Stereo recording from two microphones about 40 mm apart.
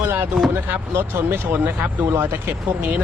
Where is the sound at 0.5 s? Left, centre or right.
Right.